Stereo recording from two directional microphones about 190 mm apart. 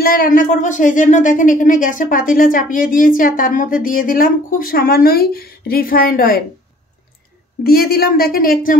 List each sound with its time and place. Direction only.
0.0 s speech: 50° left (ahead or behind)
7.6 s speech: 50° left (ahead or behind)